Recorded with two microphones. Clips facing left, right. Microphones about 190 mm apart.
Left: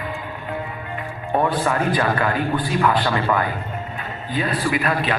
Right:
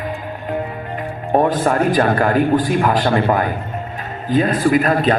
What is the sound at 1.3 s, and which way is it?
A man's voice, 40° right (ahead or behind).